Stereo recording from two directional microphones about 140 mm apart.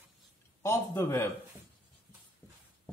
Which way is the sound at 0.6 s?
20° left (ahead or behind).